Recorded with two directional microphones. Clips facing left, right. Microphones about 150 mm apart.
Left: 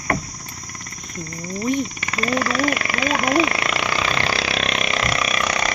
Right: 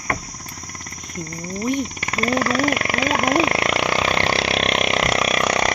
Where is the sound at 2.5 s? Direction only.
50° right (ahead or behind); by 5.4 s 70° right (ahead or behind).